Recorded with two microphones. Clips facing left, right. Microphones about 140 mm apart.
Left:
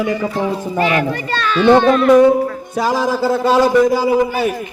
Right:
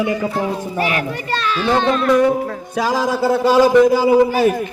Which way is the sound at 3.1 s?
5° right (ahead or behind).